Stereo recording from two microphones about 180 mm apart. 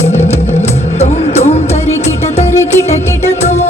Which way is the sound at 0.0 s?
35° left (ahead or behind).